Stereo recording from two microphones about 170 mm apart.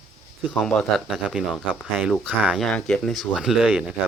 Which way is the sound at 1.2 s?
Centre (ahead or behind).